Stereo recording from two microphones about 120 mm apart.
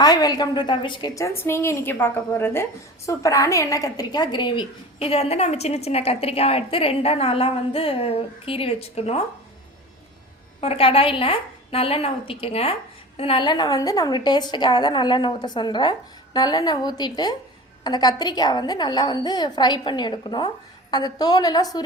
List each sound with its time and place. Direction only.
0.0 s a woman's voice: 35° left (ahead or behind)
1.1 s a woman's voice: 20° left (ahead or behind); by 5.0 s 40° left (ahead or behind)
5.0 s a woman's voice: 55° left (ahead or behind)
10.6 s a woman's voice: 50° left (ahead or behind); by 21.8 s 35° left (ahead or behind)